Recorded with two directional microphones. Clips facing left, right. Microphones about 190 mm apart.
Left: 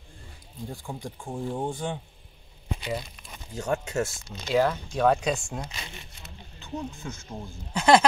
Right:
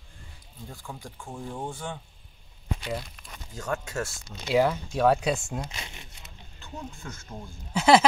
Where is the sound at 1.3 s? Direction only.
20° left (ahead or behind).